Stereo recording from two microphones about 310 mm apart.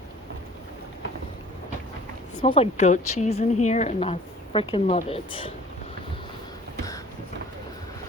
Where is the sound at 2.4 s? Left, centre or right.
Centre.